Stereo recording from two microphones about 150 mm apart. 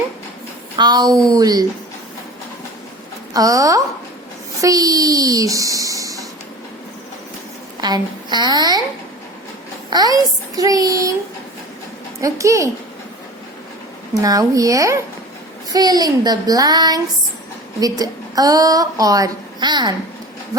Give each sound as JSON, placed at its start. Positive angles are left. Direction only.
{"t": 0.8, "sound": "a woman's voice", "side_deg": -25}
{"t": 3.3, "sound": "a woman's voice", "side_deg": -25}
{"t": 7.8, "sound": "a woman's voice", "side_deg": -30}
{"t": 9.9, "sound": "a woman's voice", "side_deg": -25}
{"t": 12.2, "sound": "a woman's voice", "side_deg": -20}
{"t": 14.1, "sound": "a woman's voice", "side_deg": -25}